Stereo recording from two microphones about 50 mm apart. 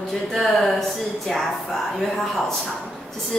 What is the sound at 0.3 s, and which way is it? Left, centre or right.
A woman's voice, centre.